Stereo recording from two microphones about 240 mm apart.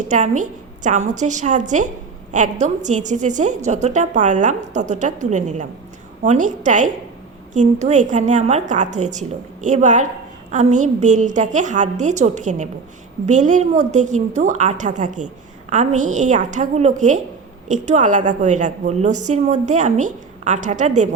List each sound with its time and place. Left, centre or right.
0.1 s a woman's voice: right